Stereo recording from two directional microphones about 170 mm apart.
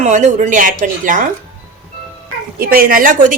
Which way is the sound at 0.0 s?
45° right (ahead or behind).